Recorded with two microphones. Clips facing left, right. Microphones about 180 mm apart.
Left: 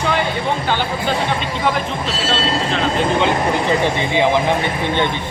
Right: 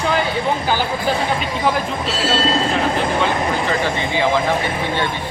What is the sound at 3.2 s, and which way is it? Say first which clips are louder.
Speech: left 2 dB; 20° left (ahead or behind).